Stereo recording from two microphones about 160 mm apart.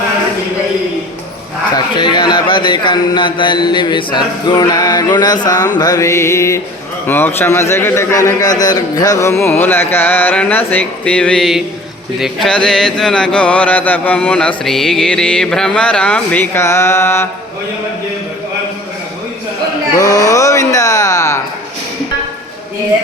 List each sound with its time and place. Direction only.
1.7 s speech: 30° left (ahead or behind)
7.1 s a sound: 15° left (ahead or behind)
20.0 s music: 20° left (ahead or behind)